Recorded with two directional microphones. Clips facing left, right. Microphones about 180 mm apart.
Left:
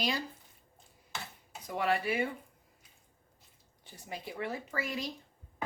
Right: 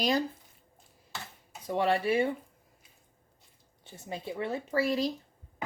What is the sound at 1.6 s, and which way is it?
Speech, 30° right (ahead or behind).